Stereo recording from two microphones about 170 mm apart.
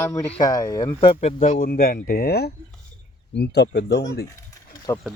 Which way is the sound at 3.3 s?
80° left.